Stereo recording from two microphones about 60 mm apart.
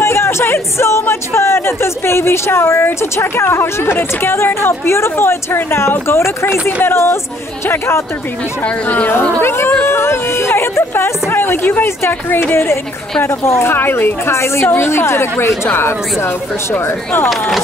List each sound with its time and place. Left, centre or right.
0.0 s speech: left
8.8 s speech: left
9.4 s speech: left